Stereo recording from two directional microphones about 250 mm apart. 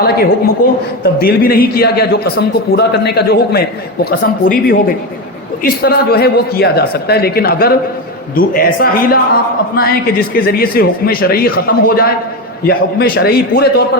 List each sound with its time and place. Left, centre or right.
0.0 s a man's voice: left